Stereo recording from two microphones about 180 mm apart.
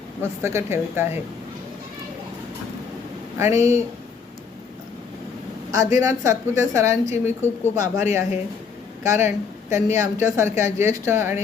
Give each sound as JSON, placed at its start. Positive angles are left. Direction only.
{"t": 0.2, "sound": "speech", "side_deg": -15}
{"t": 3.3, "sound": "speech", "side_deg": -15}
{"t": 5.7, "sound": "speech", "side_deg": -20}
{"t": 7.1, "sound": "speech", "side_deg": 40}
{"t": 7.8, "sound": "speech", "side_deg": -15}